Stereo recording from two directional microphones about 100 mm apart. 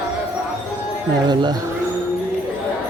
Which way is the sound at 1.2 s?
45° right (ahead or behind).